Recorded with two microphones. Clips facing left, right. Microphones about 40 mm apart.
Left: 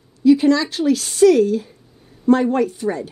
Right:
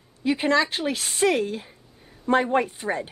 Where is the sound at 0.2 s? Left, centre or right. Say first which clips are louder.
Left 8 dB; right.